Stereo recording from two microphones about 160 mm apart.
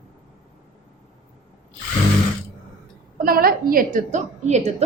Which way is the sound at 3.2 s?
65° right (ahead or behind).